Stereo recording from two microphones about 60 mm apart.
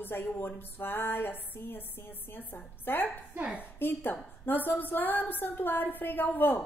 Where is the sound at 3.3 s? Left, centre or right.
Right.